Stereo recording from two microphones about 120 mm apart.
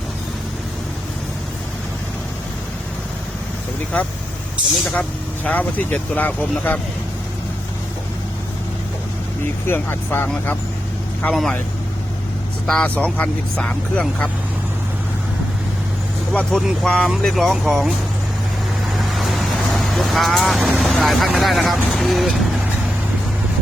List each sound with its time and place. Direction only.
4.9 s speech: 10° left (ahead or behind)
9.6 s speech: 20° left (ahead or behind)
11.2 s speech: 5° left (ahead or behind)
12.6 s speech: 10° left (ahead or behind)
16.3 s speech: 10° left (ahead or behind)
18.9 s vehicle: centre (ahead or behind)
21.3 s speech: centre (ahead or behind)